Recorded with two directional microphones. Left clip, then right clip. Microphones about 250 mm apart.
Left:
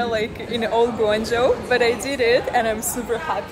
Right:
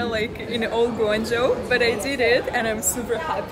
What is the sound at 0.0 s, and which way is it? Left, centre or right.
A woman's voice, centre.